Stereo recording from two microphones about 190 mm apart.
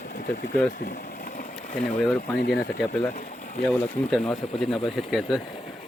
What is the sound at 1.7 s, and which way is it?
Speech, 45° left (ahead or behind).